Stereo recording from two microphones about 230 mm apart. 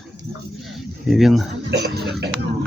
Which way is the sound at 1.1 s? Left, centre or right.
Centre.